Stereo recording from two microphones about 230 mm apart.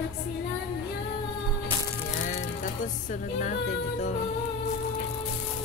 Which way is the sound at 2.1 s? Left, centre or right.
Left.